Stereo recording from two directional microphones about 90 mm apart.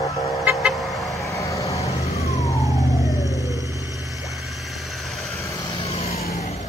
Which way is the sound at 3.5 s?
40° right (ahead or behind).